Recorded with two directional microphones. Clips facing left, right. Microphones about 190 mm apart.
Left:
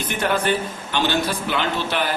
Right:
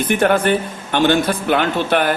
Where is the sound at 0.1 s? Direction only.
50° right (ahead or behind).